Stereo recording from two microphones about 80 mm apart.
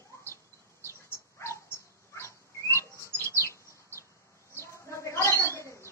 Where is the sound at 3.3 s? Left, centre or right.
Left.